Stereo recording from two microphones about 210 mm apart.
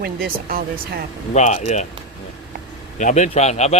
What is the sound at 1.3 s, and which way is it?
Speech, 35° left (ahead or behind).